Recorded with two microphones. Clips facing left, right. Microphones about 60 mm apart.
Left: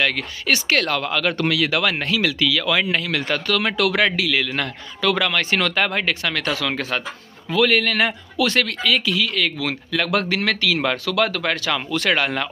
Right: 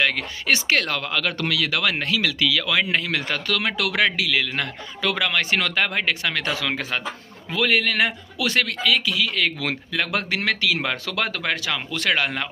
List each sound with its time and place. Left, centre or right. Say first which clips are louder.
0.0 s speech: left 1 dB; centre
0.7 s a man's voice: left 3 dB; centre
1.4 s speech: left 5 dB; left
1.9 s a man's voice: left 2 dB; centre
2.9 s speech: left 1 dB; centre
3.3 s a man's voice: left 3 dB; centre
11.1 s speech: left 5 dB; right
11.4 s speech: left 3 dB; centre
11.7 s a man's voice: left 3 dB; centre